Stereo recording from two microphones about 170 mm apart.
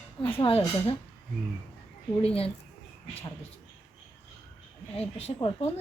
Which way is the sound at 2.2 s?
35° left (ahead or behind).